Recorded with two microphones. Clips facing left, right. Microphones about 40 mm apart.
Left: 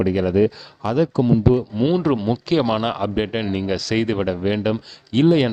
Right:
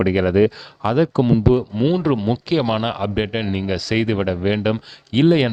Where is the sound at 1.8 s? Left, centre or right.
Centre.